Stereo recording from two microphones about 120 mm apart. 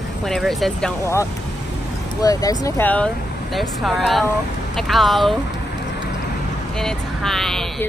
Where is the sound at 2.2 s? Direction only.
30° left (ahead or behind).